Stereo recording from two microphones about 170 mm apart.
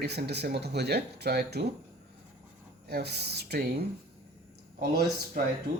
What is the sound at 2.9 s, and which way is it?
Speech, 70° right (ahead or behind).